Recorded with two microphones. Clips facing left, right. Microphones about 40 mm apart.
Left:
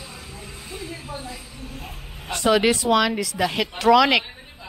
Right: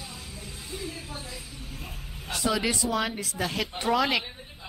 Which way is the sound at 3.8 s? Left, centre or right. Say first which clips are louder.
Left 9 dB; left.